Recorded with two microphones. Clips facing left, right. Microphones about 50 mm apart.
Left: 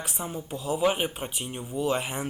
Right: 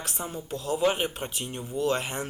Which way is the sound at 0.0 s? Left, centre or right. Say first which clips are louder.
Left 1 dB; centre.